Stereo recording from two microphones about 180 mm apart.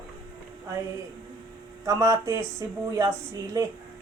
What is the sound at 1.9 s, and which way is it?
A woman's voice, 20° right (ahead or behind).